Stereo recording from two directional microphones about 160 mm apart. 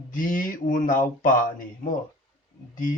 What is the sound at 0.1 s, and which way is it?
Speech, 55° left (ahead or behind).